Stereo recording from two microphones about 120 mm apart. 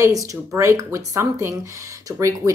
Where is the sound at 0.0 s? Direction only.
25° right (ahead or behind).